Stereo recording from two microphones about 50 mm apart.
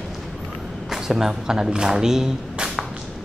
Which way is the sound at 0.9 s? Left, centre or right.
Centre.